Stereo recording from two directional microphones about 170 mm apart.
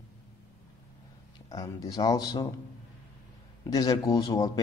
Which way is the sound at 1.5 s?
25° left (ahead or behind).